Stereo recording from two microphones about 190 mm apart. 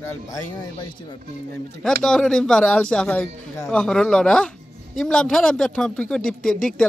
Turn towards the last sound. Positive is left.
turn(degrees=5)  # may be behind; listen again after turning